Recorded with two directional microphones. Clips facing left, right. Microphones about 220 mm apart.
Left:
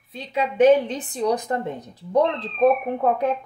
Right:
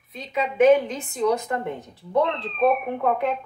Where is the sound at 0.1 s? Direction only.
30° left (ahead or behind).